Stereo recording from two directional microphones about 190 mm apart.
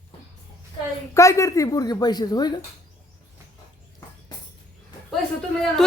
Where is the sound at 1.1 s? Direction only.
15° left (ahead or behind).